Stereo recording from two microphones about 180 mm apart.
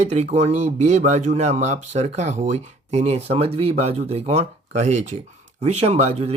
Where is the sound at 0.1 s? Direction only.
40° right (ahead or behind).